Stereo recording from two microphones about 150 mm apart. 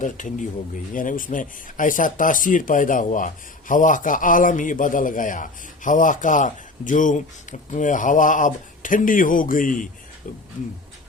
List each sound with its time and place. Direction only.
0.0 s speech: 60° left (ahead or behind)